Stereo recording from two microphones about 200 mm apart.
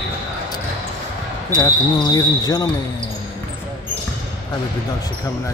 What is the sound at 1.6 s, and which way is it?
Speech, 20° left (ahead or behind).